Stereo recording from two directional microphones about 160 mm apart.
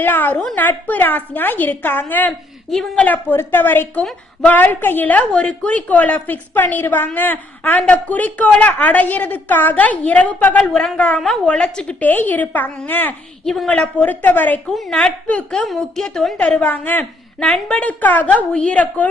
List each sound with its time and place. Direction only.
0.0 s a woman's voice: 10° left (ahead or behind)